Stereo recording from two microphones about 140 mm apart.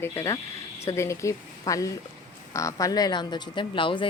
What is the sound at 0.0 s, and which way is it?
A woman's voice, 15° left (ahead or behind).